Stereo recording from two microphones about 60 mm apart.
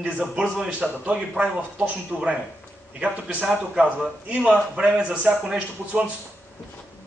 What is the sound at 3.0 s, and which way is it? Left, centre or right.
Speech, right.